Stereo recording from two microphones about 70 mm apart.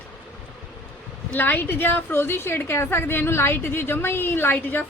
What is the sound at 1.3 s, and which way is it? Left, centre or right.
A woman's voice, left.